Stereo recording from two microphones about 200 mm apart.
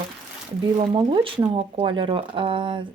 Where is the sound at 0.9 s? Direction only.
25° right (ahead or behind).